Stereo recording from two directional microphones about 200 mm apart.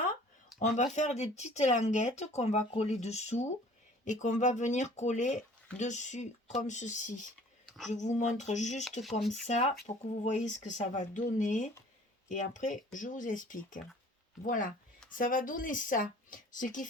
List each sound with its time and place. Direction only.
0.6 s speech: 35° left (ahead or behind)
7.7 s speech: centre (ahead or behind)
7.9 s speech: 35° left (ahead or behind)
8.8 s speech: centre (ahead or behind)
9.3 s speech: 35° left (ahead or behind)